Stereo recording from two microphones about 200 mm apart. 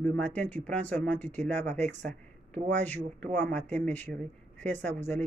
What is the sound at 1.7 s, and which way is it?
Speech, 35° right (ahead or behind).